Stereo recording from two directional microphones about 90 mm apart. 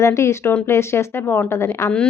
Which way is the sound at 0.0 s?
35° left (ahead or behind).